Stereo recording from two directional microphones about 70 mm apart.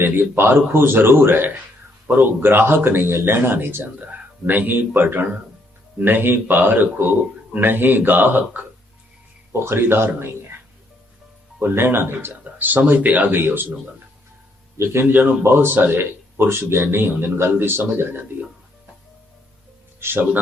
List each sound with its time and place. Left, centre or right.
0.0 s a man's voice: right
9.5 s a man's voice: right
11.6 s a man's voice: right
15.0 s a man's voice: right
20.0 s a man's voice: right